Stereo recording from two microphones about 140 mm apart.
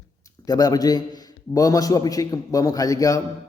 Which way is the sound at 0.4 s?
25° left (ahead or behind).